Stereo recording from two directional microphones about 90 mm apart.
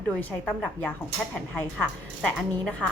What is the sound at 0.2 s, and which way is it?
Speech, 20° left (ahead or behind).